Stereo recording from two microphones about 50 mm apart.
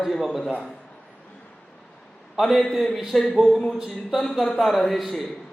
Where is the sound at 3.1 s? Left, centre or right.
Centre.